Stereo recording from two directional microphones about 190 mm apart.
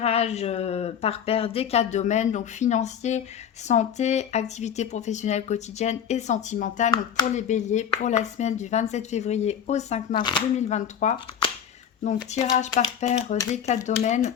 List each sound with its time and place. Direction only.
0.0 s speech: 35° left (ahead or behind)
10.2 s speech: 25° left (ahead or behind)
10.7 s speech: 35° left (ahead or behind)